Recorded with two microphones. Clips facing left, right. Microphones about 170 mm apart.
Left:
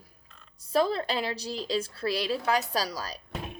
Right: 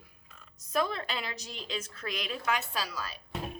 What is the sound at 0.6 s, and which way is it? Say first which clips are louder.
A woman's voice: left 6 dB; 30° left (ahead or behind).